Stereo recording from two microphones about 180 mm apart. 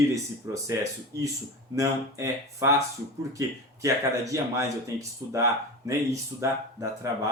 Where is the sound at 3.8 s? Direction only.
15° right (ahead or behind).